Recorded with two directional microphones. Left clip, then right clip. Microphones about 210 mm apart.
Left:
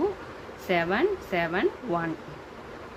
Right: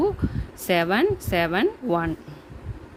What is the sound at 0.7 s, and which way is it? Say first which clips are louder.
A woman's voice: right 4 dB; 55° right (ahead or behind).